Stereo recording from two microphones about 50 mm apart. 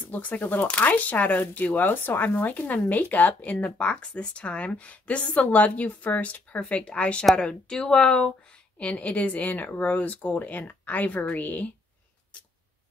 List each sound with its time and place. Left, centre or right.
0.1 s speech: left; by 8.3 s centre
8.7 s speech: left